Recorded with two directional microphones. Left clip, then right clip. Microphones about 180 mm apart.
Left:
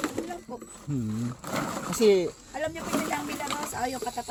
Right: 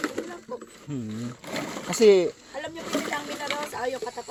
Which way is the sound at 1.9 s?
15° right (ahead or behind).